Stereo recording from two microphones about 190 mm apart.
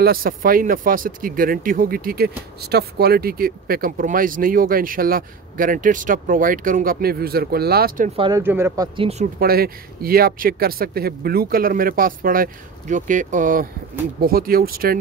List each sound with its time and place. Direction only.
0.0 s speech: 50° right (ahead or behind)
8.4 s speech: 10° right (ahead or behind)
9.4 s speech: 50° right (ahead or behind)